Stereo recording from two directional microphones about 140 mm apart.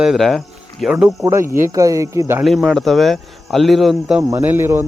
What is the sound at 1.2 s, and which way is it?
Speech, 20° right (ahead or behind).